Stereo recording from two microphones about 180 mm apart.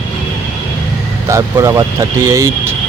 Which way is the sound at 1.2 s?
15° right (ahead or behind).